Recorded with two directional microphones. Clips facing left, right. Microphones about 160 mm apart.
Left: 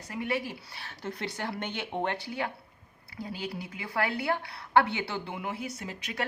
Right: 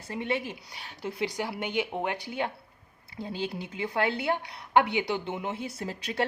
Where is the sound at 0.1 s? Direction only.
25° right (ahead or behind).